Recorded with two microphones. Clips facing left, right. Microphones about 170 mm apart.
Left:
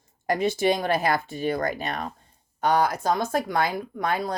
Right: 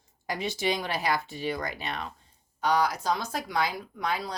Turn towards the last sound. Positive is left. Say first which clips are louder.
# left 5 dB
turn(degrees=50)  # may be behind; listen again after turning